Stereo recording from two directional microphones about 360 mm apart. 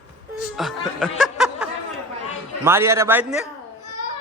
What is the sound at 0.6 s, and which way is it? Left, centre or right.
Speech, centre.